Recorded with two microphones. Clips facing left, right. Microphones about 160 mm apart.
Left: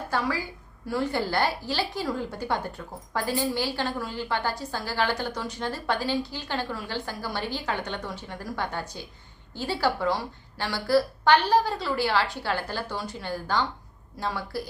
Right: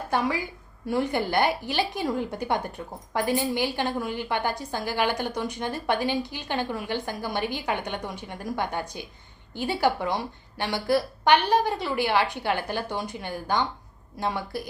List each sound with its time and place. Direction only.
0.1 s a woman's voice: 20° right (ahead or behind)